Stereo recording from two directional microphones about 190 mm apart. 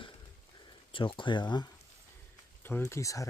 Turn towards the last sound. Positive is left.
turn(degrees=15)  # may be behind; listen again after turning